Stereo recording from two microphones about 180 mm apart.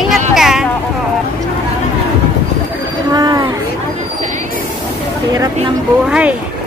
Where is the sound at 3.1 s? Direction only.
20° right (ahead or behind).